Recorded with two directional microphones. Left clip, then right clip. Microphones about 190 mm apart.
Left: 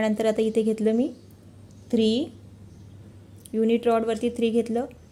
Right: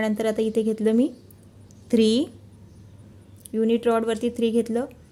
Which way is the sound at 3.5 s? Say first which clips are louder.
Even; 5° right (ahead or behind).